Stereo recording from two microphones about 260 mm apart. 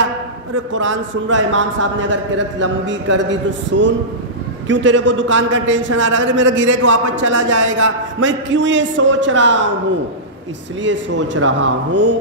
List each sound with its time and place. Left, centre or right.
0.7 s a man's voice: right
10.8 s a man's voice: right